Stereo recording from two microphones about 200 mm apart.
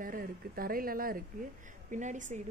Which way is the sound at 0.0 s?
45° right (ahead or behind).